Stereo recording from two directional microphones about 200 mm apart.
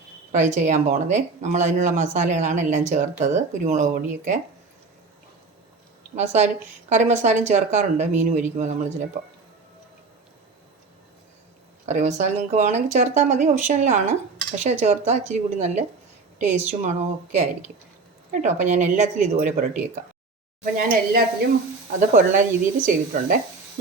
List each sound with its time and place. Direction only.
0.3 s speech: 35° right (ahead or behind)
6.1 s speech: 35° right (ahead or behind)
11.9 s speech: 35° right (ahead or behind)